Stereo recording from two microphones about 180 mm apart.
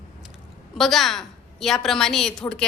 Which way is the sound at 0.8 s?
Centre (ahead or behind).